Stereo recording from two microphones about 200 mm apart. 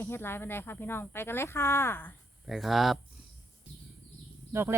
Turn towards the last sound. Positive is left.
turn(degrees=-15)  # may be behind; listen again after turning